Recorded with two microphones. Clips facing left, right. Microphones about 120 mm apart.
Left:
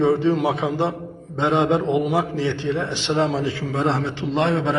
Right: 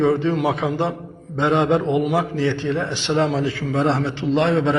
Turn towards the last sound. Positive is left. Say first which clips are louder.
# right 3 dB
turn(degrees=15)  # may be behind; listen again after turning